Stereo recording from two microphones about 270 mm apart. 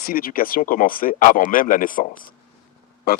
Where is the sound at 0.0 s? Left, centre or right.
Left.